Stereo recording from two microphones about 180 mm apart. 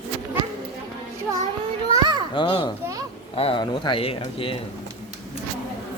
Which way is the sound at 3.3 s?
30° left (ahead or behind).